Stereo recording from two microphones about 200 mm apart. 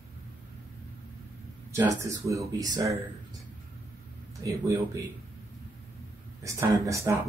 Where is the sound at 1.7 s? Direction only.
15° right (ahead or behind).